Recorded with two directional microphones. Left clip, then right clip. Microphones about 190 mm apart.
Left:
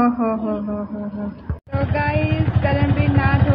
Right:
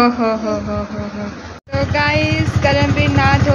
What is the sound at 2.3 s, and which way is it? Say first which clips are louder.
Speech: right 6 dB; 15° right (ahead or behind).